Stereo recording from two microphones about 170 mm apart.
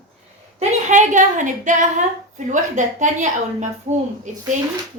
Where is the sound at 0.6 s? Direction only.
45° right (ahead or behind).